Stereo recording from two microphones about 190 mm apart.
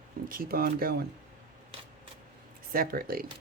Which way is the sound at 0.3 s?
50° right (ahead or behind).